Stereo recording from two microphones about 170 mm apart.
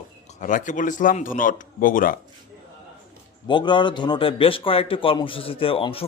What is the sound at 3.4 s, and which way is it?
Speech, 25° left (ahead or behind).